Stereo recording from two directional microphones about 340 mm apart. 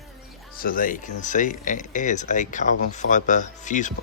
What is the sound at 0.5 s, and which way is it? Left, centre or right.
Speech, left.